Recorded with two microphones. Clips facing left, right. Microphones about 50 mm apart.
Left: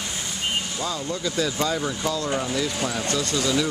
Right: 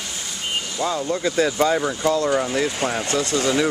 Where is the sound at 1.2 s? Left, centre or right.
Right.